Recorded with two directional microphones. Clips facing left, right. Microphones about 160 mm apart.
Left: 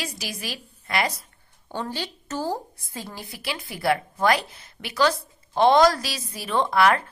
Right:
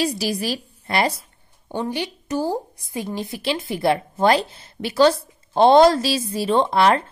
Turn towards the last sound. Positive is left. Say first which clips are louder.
# right 3 dB
turn(degrees=-30)  # may be behind; listen again after turning